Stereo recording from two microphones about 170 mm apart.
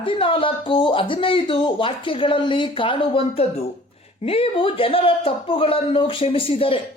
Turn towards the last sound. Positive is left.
turn(degrees=30)  # may be behind; listen again after turning